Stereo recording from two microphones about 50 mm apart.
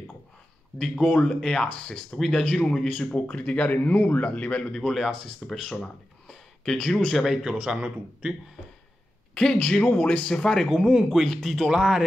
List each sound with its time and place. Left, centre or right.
0.7 s speech: centre
2.1 s speech: centre
2.4 s speech: centre
3.0 s a man's voice: left
4.7 s speech: centre
7.4 s speech: centre
9.3 s a man's voice: centre
10.6 s speech: centre
11.2 s speech: centre
11.7 s speech: centre